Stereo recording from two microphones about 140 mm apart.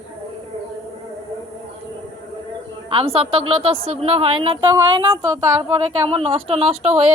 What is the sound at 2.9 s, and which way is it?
A woman's voice, 40° right (ahead or behind).